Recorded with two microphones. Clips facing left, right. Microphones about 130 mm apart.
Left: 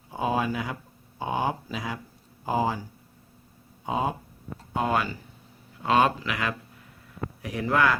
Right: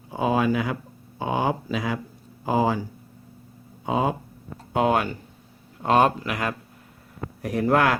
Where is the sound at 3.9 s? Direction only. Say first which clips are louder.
Right 4 dB; 90° right.